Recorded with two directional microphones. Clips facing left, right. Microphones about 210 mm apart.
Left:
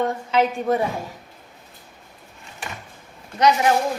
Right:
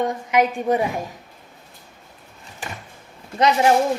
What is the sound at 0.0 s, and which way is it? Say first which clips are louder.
A woman's voice: right 1 dB; 15° right (ahead or behind).